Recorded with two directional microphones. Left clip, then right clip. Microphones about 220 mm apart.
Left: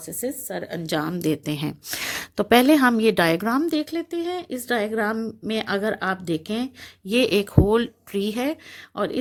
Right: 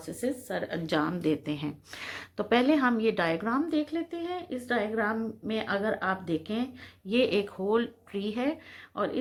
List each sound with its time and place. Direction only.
0.2 s speech: 40° left (ahead or behind)